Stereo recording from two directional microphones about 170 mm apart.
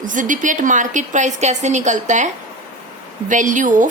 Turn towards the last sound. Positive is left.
turn(degrees=-50)  # may be behind; listen again after turning